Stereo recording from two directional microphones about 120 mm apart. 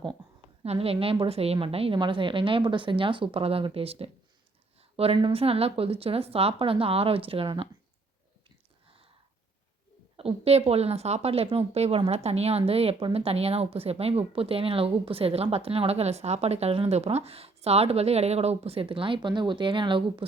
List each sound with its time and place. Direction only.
0.6 s speech: 55° right (ahead or behind)
10.2 s a woman's voice: 55° right (ahead or behind)